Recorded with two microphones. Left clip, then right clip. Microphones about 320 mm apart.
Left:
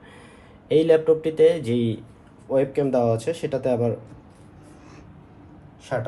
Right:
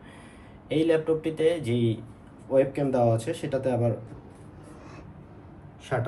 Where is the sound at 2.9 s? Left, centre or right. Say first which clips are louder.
Left 3 dB; centre.